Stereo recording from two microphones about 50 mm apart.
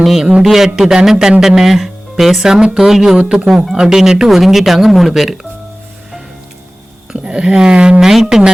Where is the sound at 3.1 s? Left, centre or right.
Right.